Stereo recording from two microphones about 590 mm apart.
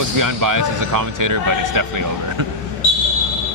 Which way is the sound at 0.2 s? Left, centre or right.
Right.